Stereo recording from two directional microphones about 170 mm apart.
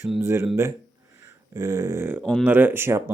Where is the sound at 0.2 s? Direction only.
15° right (ahead or behind).